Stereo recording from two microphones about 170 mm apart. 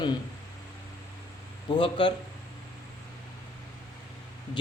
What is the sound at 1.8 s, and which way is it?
Speech, 30° left (ahead or behind).